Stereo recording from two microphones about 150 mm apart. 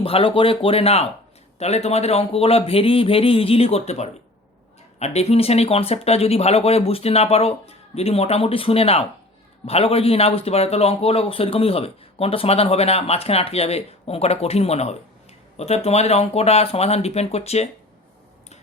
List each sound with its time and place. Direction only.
0.0 s a man's voice: 40° left (ahead or behind)